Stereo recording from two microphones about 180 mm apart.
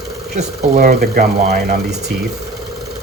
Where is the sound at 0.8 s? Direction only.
55° right (ahead or behind).